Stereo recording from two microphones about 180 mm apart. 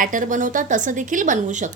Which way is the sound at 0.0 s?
45° right (ahead or behind).